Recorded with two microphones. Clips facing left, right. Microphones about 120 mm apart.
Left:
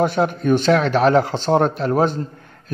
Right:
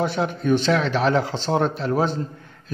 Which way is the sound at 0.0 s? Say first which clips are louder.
Left 5 dB; 50° left (ahead or behind).